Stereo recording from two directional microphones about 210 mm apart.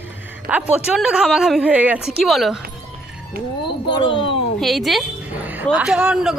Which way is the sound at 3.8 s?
20° left (ahead or behind).